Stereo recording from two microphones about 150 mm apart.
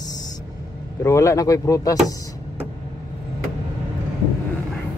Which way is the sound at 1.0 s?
20° left (ahead or behind).